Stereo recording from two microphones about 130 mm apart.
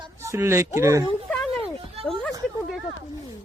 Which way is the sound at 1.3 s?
5° left (ahead or behind).